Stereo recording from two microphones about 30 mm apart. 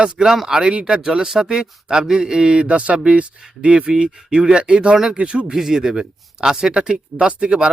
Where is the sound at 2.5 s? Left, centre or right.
Right.